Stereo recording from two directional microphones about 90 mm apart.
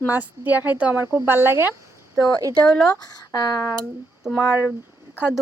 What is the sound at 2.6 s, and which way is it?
Speech, 10° left (ahead or behind).